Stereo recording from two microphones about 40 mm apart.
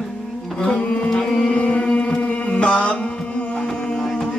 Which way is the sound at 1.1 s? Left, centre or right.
Centre.